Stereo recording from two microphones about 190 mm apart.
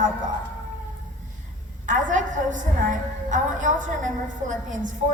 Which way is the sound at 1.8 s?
40° right (ahead or behind).